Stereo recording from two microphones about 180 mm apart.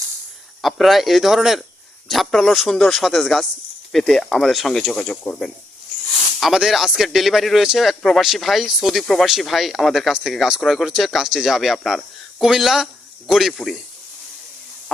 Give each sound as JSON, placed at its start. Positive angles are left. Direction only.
{"t": 0.6, "sound": "a man's voice", "side_deg": 0}